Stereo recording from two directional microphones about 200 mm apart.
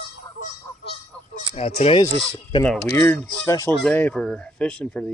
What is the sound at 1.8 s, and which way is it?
Speech, 25° left (ahead or behind).